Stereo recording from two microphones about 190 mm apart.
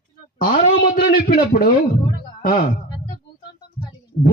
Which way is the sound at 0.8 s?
50° left (ahead or behind).